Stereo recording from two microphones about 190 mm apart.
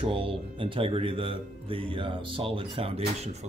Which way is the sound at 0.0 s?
30° right (ahead or behind).